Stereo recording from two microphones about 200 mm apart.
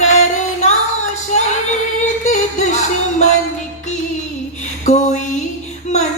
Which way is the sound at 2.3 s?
35° left (ahead or behind).